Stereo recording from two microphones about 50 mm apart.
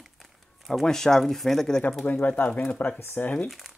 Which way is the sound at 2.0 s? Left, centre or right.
Left.